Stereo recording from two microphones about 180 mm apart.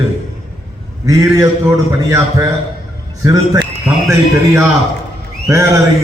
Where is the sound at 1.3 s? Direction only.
15° right (ahead or behind).